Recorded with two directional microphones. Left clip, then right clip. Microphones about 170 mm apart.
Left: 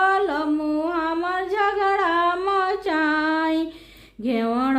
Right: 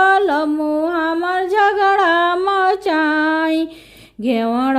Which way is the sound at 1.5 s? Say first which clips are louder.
Right 7 dB; 40° right (ahead or behind).